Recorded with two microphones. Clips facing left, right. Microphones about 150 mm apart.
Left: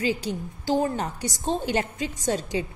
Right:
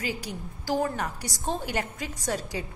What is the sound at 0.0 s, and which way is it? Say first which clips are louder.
A woman's voice: left 7 dB; 25° left (ahead or behind).